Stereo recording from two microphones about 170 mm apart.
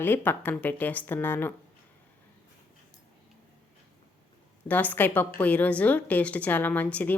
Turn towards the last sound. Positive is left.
turn(degrees=10)  # may be behind; listen again after turning